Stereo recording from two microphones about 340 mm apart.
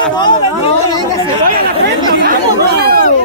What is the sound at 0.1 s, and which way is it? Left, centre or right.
Speech, centre.